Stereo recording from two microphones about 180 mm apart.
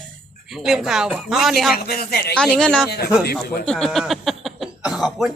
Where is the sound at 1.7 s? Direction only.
60° left (ahead or behind).